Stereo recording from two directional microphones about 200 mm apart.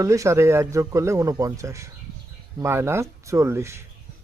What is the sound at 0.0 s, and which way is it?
A man's voice, 15° right (ahead or behind).